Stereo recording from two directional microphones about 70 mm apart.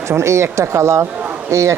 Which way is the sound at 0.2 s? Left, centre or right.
Right.